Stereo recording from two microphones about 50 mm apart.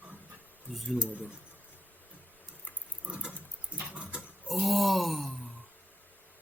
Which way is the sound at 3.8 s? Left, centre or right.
Right.